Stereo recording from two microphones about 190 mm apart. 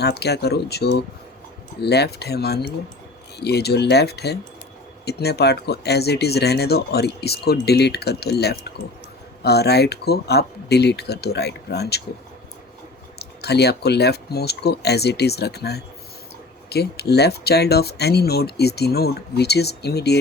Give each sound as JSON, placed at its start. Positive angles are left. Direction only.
{"t": 0.0, "sound": "speech", "side_deg": 60}
{"t": 13.1, "sound": "speech", "side_deg": 60}